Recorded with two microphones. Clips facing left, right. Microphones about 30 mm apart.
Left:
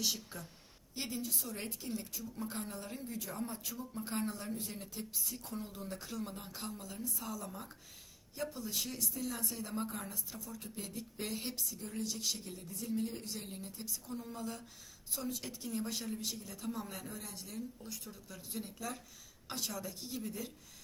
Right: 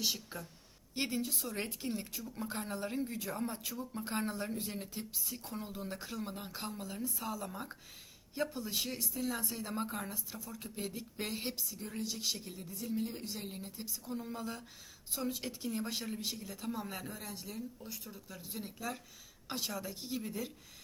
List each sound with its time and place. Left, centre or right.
0.0 s speech: centre
0.9 s speech: right
2.4 s speech: centre
5.1 s speech: centre
8.6 s speech: right
9.1 s speech: centre